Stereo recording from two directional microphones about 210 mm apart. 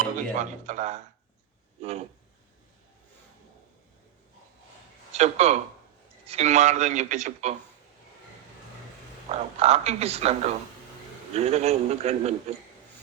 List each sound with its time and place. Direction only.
0.0 s speech: 35° right (ahead or behind)
5.1 s speech: 30° right (ahead or behind)
9.6 s speech: 30° right (ahead or behind)